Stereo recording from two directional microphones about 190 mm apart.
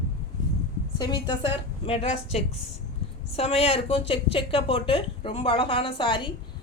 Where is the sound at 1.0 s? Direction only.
25° left (ahead or behind).